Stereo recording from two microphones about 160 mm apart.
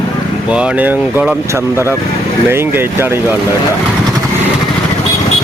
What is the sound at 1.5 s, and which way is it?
Speech, 15° right (ahead or behind).